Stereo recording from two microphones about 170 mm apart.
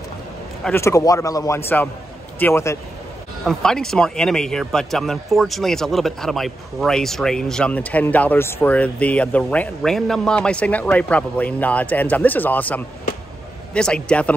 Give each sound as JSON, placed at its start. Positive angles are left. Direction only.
{"t": 0.7, "sound": "speech", "side_deg": 15}
{"t": 3.4, "sound": "speech", "side_deg": 5}